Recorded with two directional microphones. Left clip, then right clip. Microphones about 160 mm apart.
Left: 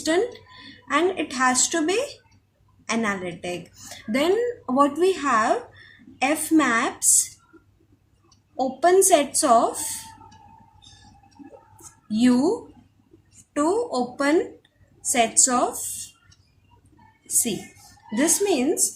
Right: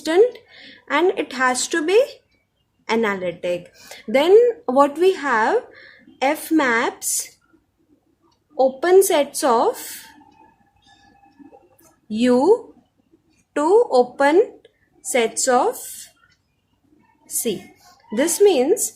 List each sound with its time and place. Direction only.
0.0 s a woman's voice: 45° right (ahead or behind)
8.5 s a woman's voice: 45° right (ahead or behind)
12.1 s a woman's voice: 50° right (ahead or behind)
18.2 s a woman's voice: 45° right (ahead or behind)